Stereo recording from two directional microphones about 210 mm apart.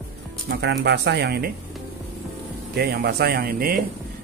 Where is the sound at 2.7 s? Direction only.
50° right (ahead or behind).